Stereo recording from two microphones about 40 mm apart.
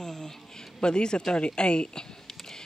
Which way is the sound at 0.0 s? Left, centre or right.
Centre.